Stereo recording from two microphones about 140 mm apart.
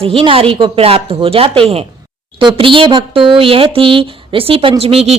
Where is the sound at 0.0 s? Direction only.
40° right (ahead or behind).